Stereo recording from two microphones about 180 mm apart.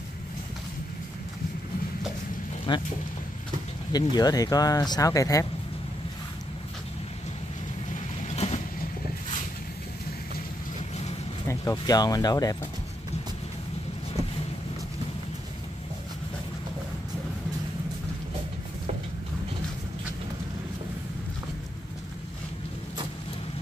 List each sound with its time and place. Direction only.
2.7 s speech: 25° left (ahead or behind)
3.9 s speech: 20° left (ahead or behind)
7.9 s vehicle: 35° left (ahead or behind)
11.4 s speech: 15° left (ahead or behind)